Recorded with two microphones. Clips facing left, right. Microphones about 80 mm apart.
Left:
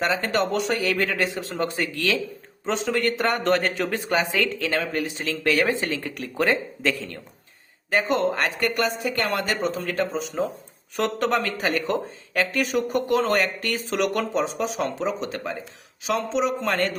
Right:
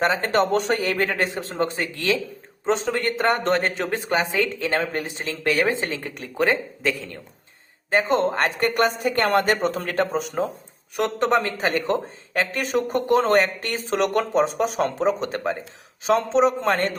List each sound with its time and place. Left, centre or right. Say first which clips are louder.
0.0 s speech: right 3 dB; right; by 7.2 s centre
7.9 s speech: right 2 dB; right
10.9 s speech: right 2 dB; right